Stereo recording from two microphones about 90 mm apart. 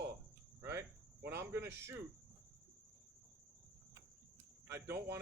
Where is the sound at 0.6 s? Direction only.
30° right (ahead or behind).